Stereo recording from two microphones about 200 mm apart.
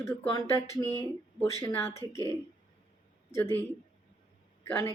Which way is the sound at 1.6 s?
10° left (ahead or behind).